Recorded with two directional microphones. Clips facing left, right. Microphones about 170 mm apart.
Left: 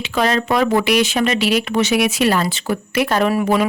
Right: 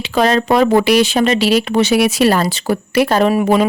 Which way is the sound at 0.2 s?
35° right (ahead or behind).